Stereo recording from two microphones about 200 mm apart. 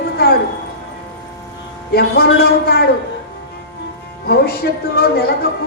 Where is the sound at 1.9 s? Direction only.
50° left (ahead or behind).